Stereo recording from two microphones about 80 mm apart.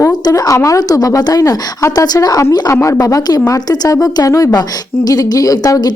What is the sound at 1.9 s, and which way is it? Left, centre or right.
A woman's voice, left.